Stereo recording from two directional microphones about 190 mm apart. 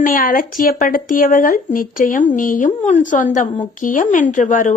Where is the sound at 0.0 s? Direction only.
45° left (ahead or behind).